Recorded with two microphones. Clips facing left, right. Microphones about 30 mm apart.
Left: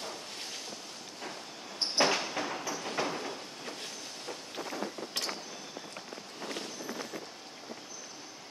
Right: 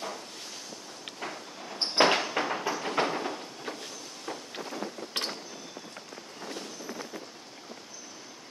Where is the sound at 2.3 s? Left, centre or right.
Right.